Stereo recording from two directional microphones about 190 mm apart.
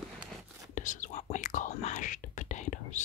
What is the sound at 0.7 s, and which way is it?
Whispering, 40° left (ahead or behind).